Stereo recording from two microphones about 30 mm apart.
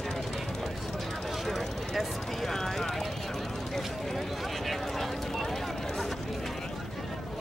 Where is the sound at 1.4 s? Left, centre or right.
Centre.